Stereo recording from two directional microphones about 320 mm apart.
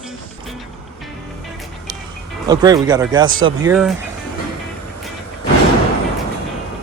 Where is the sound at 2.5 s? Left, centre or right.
Centre.